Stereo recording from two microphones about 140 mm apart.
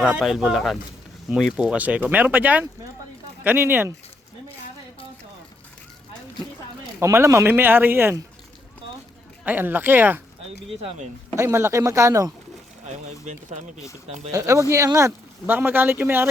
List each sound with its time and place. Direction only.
0.2 s speech: centre (ahead or behind)
7.0 s speech: 20° right (ahead or behind)
9.4 s speech: 10° right (ahead or behind)
10.8 s speech: 50° right (ahead or behind)
11.3 s speech: 20° right (ahead or behind)
12.8 s speech: 60° right (ahead or behind)
14.3 s speech: 20° right (ahead or behind)